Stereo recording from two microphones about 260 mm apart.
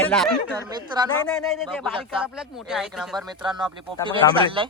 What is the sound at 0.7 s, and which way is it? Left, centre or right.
Speech, centre.